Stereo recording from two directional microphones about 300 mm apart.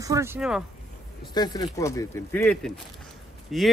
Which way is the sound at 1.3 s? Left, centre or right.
Centre.